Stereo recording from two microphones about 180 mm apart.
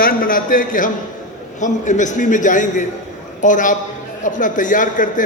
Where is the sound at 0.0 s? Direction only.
50° left (ahead or behind).